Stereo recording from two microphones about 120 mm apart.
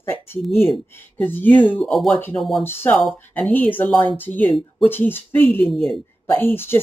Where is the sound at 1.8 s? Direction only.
Centre (ahead or behind).